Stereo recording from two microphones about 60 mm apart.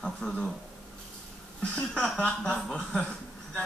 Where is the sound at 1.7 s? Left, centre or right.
Left.